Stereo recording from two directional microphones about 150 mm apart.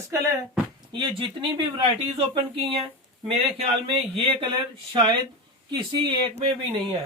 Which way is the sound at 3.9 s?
35° right (ahead or behind).